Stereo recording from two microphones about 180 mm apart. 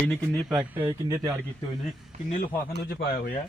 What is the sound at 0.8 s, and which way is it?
Speech, 20° right (ahead or behind).